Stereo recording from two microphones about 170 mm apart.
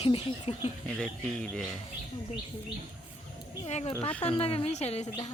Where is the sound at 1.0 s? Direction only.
5° left (ahead or behind).